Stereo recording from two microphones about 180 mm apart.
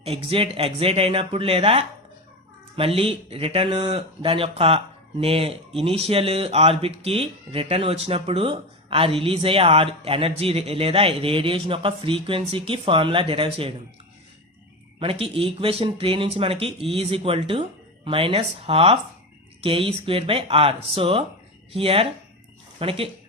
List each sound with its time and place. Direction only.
0.0 s speech: 35° right (ahead or behind)
14.9 s speech: 30° right (ahead or behind)